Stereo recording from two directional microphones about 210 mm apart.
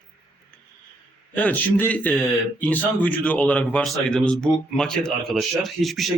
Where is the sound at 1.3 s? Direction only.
10° left (ahead or behind).